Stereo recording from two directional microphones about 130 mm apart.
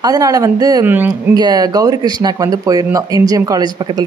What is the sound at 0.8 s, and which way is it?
Speech, 15° right (ahead or behind).